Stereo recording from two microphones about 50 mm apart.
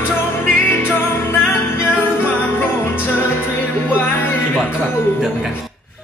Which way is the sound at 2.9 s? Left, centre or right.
Left.